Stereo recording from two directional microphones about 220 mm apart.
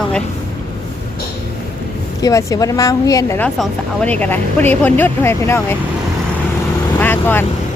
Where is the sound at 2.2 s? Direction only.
15° left (ahead or behind).